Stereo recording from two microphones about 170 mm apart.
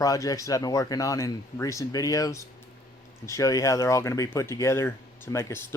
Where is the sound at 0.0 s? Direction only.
20° left (ahead or behind).